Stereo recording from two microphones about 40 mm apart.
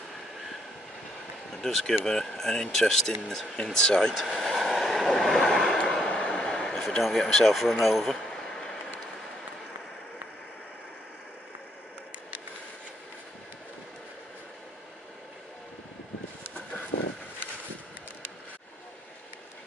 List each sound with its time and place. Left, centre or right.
1.5 s speech: centre
3.7 s speech: centre
4.3 s vehicle: centre
5.0 s train: centre
5.4 s vehicle: centre
5.9 s a sound: centre
7.0 s speech: centre
7.8 s keys jangling: centre